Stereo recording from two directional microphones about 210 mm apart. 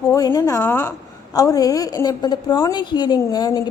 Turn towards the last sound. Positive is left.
turn(degrees=20)  # may be behind; listen again after turning